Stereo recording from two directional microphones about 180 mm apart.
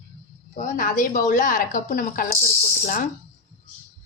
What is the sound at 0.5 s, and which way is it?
Speech, 45° left (ahead or behind).